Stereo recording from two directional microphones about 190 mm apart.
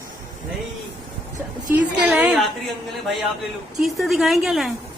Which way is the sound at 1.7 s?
10° right (ahead or behind).